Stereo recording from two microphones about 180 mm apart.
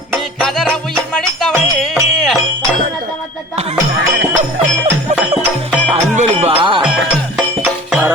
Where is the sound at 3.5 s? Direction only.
35° right (ahead or behind).